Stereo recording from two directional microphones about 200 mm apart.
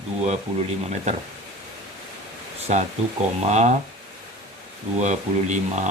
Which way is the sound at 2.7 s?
35° right (ahead or behind).